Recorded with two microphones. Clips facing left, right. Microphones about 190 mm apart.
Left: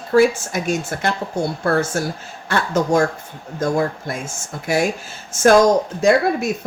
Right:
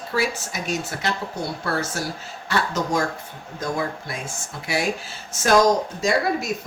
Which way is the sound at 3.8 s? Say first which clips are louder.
Left 6 dB; 45° left (ahead or behind).